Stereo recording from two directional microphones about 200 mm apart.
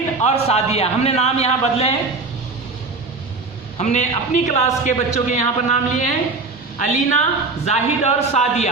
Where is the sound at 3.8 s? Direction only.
35° left (ahead or behind).